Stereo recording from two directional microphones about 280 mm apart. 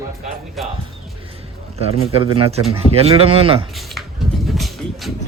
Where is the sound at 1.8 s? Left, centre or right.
Right.